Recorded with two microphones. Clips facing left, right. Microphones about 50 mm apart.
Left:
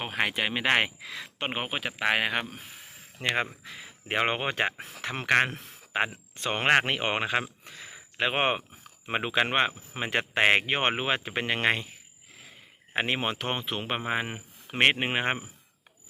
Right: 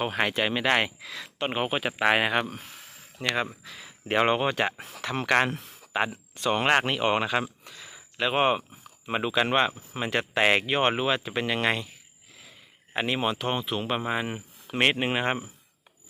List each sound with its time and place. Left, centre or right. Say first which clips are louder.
0.0 s speech: right 3 dB; centre
0.6 s speech: left 3 dB; left
2.0 s speech: right 3 dB; centre
3.4 s speech: right 2 dB; left
4.1 s speech: right 4 dB; centre
4.4 s speech: right 2 dB; left
7.6 s a sound: left 1 dB; left
9.0 s speech: right 1 dB; left
12.9 s speech: right 1 dB; left